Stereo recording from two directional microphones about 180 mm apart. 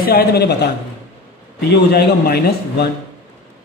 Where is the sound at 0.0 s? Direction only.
60° left (ahead or behind).